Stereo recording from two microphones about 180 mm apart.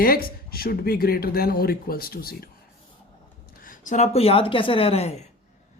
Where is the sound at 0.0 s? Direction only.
55° left (ahead or behind).